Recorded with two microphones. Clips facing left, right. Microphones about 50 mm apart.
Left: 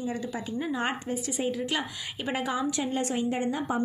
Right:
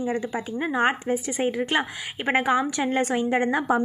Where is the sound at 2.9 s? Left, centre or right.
Right.